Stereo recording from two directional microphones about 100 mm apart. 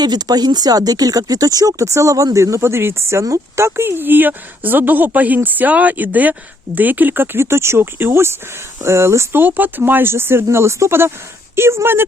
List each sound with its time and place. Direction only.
0.0 s speech: 45° right (ahead or behind); by 12.0 s 25° right (ahead or behind)